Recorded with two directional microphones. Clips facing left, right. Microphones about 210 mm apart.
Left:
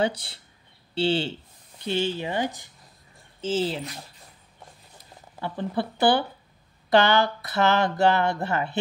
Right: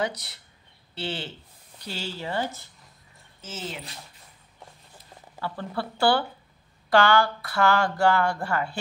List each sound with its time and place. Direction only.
0.0 s speech: 30° left (ahead or behind)
3.3 s speech: 30° left (ahead or behind)
5.4 s speech: 20° left (ahead or behind)